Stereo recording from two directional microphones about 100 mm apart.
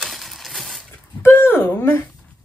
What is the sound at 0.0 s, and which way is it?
Coin, centre (ahead or behind).